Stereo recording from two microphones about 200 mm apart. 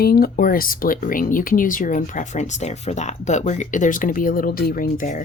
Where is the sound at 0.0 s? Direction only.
50° left (ahead or behind).